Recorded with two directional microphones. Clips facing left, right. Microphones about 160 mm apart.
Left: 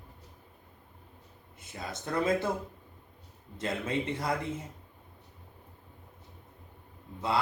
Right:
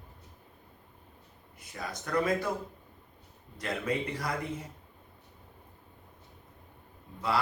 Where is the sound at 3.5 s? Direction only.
25° left (ahead or behind).